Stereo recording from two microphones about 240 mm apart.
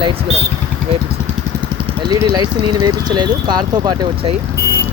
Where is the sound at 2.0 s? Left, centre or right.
Centre.